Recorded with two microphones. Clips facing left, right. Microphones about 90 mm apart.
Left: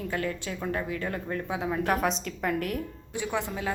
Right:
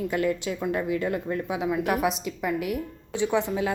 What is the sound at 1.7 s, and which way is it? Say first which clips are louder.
Speech: right 1 dB; 35° left (ahead or behind).